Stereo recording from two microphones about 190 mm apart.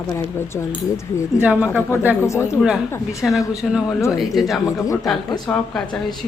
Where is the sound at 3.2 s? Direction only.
Centre (ahead or behind).